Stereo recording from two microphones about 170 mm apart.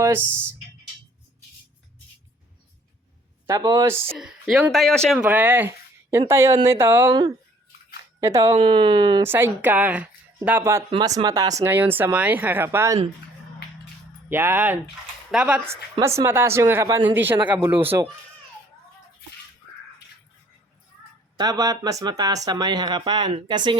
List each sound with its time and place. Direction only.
0.0 s speech: 15° right (ahead or behind)
3.4 s speech: 20° right (ahead or behind)
4.2 s speech: 5° right (ahead or behind)
7.1 s speech: 25° right (ahead or behind)
8.5 s speech: 30° right (ahead or behind)
9.2 s speech: 15° right (ahead or behind)
14.3 s speech: 15° right (ahead or behind)
21.3 s speech: 20° right (ahead or behind)